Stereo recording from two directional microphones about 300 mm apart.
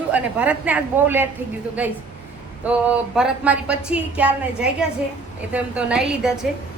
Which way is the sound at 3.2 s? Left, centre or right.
Centre.